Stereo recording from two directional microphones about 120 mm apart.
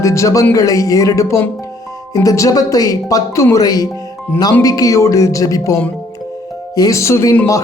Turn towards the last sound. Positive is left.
turn(degrees=25)  # may be behind; listen again after turning